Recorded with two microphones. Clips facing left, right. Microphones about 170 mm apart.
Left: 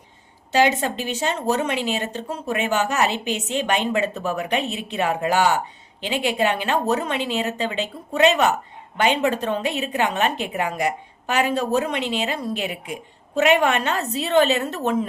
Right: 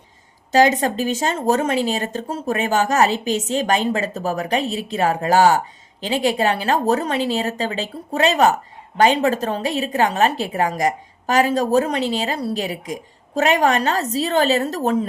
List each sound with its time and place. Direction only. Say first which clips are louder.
0.5 s speech: right 4 dB; 40° right (ahead or behind)